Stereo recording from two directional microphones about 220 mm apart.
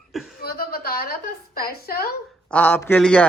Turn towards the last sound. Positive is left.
turn(degrees=5)  # may be behind; listen again after turning